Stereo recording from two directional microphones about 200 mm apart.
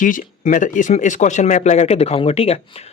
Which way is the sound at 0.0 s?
40° left (ahead or behind).